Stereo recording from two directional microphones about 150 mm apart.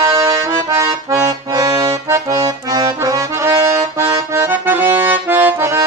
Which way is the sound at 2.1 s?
20° right (ahead or behind).